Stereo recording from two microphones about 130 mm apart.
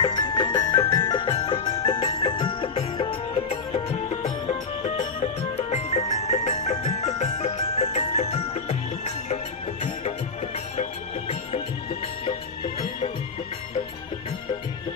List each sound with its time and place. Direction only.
0.0 s music: 30° left (ahead or behind); by 9.4 s 55° left (ahead or behind)
10.8 s music: 55° left (ahead or behind)